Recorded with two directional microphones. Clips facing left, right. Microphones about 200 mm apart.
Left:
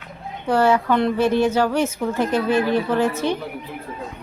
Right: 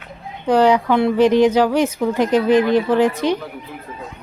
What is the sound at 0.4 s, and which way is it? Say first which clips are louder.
A woman's voice: right 3 dB; 15° right (ahead or behind).